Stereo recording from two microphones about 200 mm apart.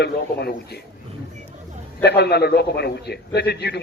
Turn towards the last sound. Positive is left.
turn(degrees=55)  # may be behind; listen again after turning